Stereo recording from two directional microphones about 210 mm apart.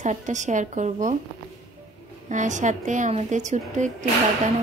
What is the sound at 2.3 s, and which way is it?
A woman's voice, 35° right (ahead or behind).